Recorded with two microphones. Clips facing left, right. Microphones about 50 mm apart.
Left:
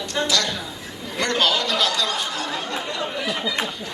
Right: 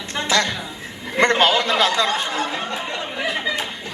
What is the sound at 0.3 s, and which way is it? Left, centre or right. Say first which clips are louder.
A woman's voice: right 3 dB; right.